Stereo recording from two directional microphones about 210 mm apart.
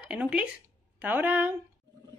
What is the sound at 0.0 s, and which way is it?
Speech, 5° right (ahead or behind).